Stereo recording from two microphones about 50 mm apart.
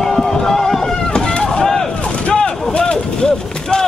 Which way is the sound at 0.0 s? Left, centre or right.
Centre.